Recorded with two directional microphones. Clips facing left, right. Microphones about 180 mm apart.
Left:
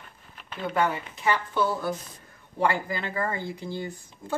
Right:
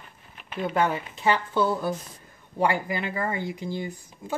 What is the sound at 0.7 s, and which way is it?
Speech, 20° right (ahead or behind).